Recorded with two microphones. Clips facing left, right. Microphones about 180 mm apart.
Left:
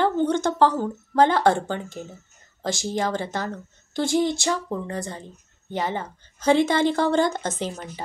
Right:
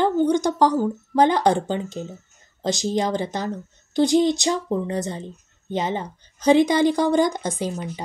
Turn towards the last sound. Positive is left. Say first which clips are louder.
# right 3 dB
turn(degrees=-15)  # may be behind; listen again after turning